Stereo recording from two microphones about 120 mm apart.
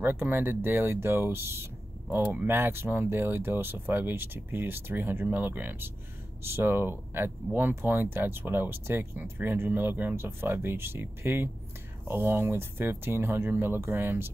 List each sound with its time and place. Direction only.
0.0 s speech: 15° right (ahead or behind)